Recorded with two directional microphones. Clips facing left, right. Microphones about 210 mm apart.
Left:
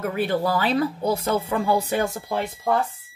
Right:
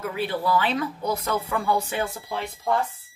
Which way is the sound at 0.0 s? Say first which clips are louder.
Left 4 dB; 50° left (ahead or behind).